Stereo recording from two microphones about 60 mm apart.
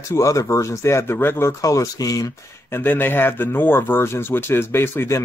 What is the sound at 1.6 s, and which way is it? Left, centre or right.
Speech, left.